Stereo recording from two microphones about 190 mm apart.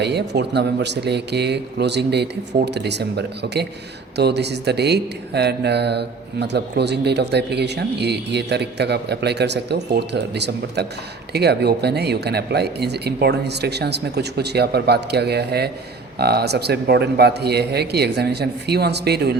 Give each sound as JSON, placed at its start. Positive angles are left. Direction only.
{"t": 0.0, "sound": "speech", "side_deg": -60}